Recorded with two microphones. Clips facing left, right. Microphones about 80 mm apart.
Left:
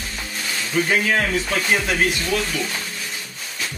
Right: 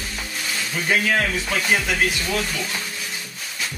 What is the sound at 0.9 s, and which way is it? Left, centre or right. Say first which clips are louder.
Speech: right 2 dB; centre.